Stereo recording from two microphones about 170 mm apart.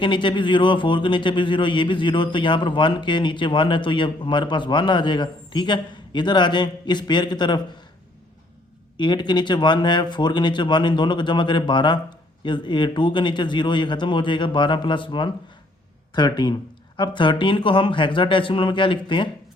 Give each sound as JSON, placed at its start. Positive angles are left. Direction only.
{"t": 0.0, "sound": "speech", "side_deg": 30}
{"t": 9.0, "sound": "speech", "side_deg": 25}